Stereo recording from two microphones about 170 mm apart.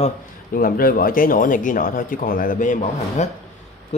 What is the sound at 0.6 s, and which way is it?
Speech, 60° left (ahead or behind).